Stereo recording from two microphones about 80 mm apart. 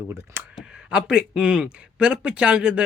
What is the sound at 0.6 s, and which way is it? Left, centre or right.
Speech, centre.